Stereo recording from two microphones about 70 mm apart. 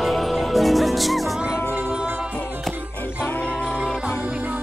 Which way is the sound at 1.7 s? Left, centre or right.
Right.